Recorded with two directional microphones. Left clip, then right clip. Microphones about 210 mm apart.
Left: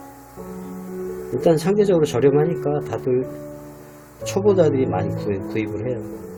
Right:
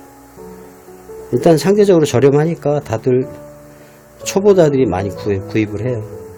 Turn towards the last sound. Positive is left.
turn(degrees=-50)  # may be behind; listen again after turning